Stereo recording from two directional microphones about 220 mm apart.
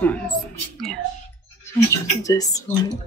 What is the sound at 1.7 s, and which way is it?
Speech, 15° left (ahead or behind).